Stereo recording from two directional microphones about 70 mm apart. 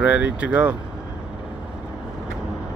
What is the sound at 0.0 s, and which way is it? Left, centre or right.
Speech, right.